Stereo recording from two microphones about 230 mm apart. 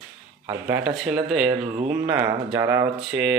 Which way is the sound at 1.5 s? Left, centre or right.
Right.